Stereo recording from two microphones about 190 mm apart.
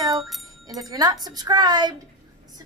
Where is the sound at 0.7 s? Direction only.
20° right (ahead or behind).